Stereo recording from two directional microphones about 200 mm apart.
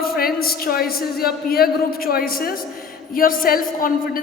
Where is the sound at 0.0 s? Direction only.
50° left (ahead or behind).